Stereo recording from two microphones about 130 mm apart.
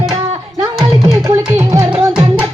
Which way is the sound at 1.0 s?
25° right (ahead or behind).